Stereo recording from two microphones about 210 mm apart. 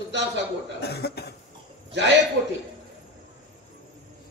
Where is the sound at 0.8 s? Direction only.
50° left (ahead or behind).